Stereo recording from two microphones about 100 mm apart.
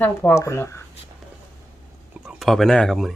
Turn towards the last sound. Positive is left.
turn(degrees=0)  # may be behind; listen again after turning